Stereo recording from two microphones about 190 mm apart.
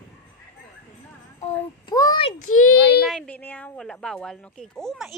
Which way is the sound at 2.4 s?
90° left.